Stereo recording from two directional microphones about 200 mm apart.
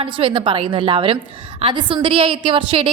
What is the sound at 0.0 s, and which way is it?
A woman's voice, 25° right (ahead or behind).